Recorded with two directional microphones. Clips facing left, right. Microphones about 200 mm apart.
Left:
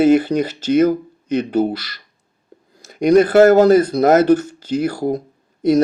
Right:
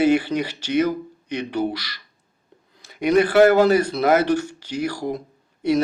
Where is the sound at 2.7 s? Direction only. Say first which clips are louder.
Left 6 dB; 45° left (ahead or behind).